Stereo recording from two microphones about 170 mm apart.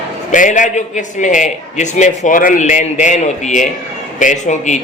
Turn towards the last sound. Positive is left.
turn(degrees=45)  # may be behind; listen again after turning